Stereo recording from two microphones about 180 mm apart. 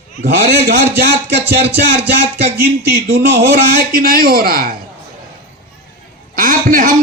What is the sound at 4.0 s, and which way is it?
Speech, 55° right (ahead or behind).